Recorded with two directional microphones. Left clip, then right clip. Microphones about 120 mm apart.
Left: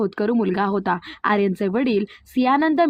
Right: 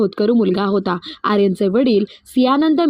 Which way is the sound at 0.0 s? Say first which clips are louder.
Right 5 dB; 40° right (ahead or behind).